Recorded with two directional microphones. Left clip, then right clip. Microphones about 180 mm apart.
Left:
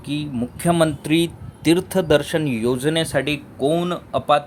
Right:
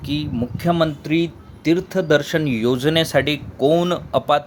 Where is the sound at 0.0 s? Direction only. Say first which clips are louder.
Right 2 dB; 10° right (ahead or behind).